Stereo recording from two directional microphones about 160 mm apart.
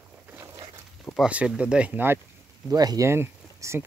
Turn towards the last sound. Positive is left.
turn(degrees=-15)  # may be behind; listen again after turning